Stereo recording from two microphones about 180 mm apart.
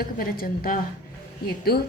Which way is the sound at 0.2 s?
55° left (ahead or behind).